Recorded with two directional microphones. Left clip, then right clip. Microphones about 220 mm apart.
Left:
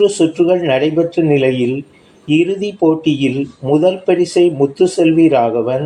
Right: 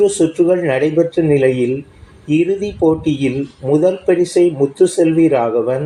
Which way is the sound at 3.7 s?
15° left (ahead or behind).